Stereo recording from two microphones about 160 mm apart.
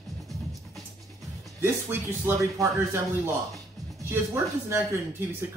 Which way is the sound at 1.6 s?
15° right (ahead or behind).